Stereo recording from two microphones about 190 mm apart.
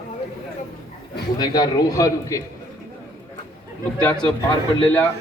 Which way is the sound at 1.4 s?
20° left (ahead or behind).